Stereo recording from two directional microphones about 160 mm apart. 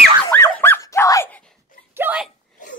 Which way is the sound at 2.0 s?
10° right (ahead or behind).